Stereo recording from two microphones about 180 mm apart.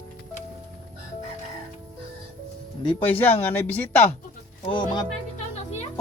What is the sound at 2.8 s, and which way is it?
Speech, 25° left (ahead or behind).